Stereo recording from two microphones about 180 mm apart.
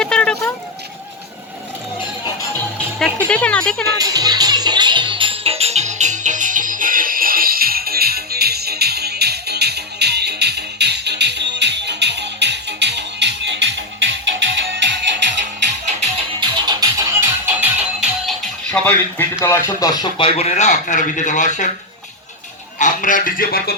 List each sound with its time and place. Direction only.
0.0 s a sound: 5° left (ahead or behind)
2.5 s music: 10° left (ahead or behind)
3.9 s music: 20° right (ahead or behind); by 14.9 s 85° right
16.4 s music: 25° right (ahead or behind); by 18.3 s 5° right (ahead or behind)
18.7 s speech: 10° left (ahead or behind); by 21.7 s 45° left (ahead or behind)
22.8 s a man's voice: 45° left (ahead or behind)